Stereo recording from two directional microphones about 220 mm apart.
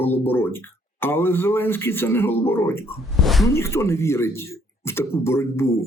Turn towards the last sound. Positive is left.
turn(degrees=10)  # may be behind; listen again after turning